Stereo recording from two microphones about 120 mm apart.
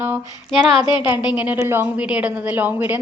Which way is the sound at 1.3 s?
10° right (ahead or behind).